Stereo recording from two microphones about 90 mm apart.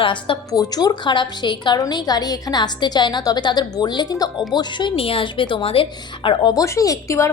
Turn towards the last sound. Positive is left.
turn(degrees=35)  # may be behind; listen again after turning